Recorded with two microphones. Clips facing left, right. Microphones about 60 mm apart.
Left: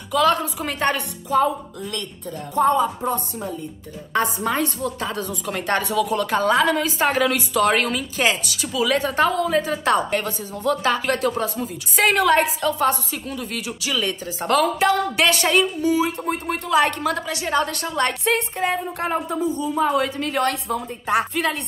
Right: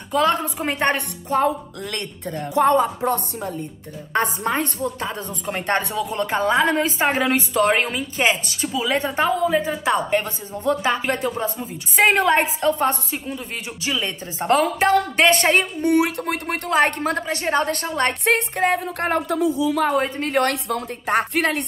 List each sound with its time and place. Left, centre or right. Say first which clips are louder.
0.1 s a woman's voice: left 1 dB; right
0.9 s speech: left 1 dB; right
1.8 s speech: right 1 dB; right
4.1 s a woman's voice: even; right
4.8 s a woman's voice: left 1 dB; right
13.3 s a woman's voice: left 1 dB; centre; by 15.6 s right
15.8 s speech: right 2 dB; right
16.7 s a woman's voice: even; right
18.2 s speech: right 2 dB; right
20.0 s speech: right 1 dB; right
21.3 s speech: right 2 dB; right